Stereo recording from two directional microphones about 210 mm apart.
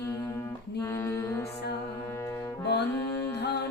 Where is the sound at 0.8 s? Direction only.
10° left (ahead or behind).